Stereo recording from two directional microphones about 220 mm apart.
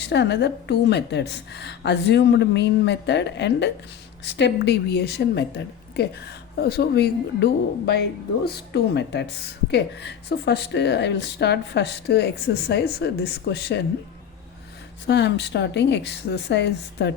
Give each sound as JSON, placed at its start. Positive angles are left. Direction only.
{"t": 0.0, "sound": "a woman's voice", "side_deg": 50}
{"t": 15.0, "sound": "a woman's voice", "side_deg": 50}